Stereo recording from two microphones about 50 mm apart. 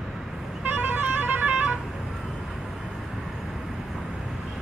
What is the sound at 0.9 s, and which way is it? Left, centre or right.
Music, right.